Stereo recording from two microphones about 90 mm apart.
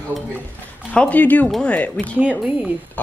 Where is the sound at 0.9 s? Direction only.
15° left (ahead or behind).